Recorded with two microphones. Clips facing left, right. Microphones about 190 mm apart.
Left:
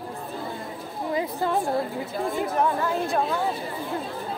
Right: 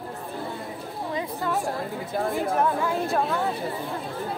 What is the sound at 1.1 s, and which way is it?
Speech, 30° left (ahead or behind).